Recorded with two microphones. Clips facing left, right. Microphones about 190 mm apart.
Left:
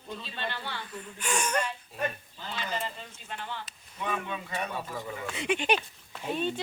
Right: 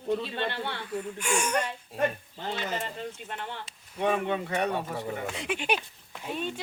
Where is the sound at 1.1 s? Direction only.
10° right (ahead or behind).